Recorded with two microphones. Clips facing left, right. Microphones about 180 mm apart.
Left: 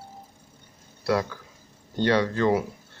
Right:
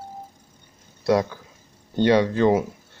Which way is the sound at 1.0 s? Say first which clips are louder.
Right 5 dB; 20° right (ahead or behind).